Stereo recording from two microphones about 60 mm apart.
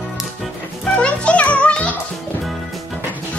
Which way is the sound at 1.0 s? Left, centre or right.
Centre.